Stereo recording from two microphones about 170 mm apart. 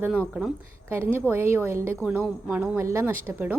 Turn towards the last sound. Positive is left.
turn(degrees=-10)  # may be behind; listen again after turning